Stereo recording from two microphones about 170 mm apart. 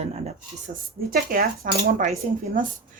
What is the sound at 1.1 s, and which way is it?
Speech, 60° right (ahead or behind).